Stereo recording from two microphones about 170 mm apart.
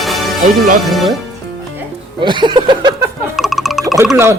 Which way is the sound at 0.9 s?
Centre (ahead or behind).